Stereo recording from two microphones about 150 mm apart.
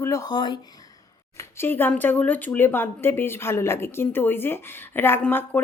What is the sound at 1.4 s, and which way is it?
A woman's voice, 15° left (ahead or behind).